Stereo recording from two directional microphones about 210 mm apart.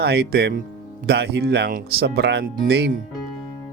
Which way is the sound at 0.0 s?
50° right (ahead or behind).